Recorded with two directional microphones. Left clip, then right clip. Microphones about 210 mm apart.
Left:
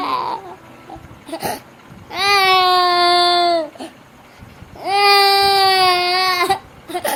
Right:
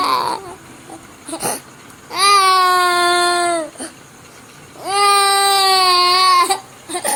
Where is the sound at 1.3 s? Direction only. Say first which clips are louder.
Even; 10° left (ahead or behind).